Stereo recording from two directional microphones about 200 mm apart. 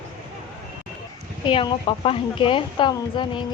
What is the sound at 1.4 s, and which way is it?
Speech, 25° left (ahead or behind).